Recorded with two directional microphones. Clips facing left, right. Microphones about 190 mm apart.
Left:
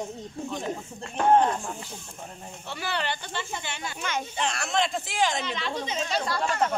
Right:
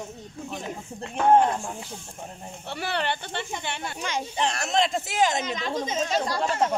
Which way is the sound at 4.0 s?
35° right (ahead or behind).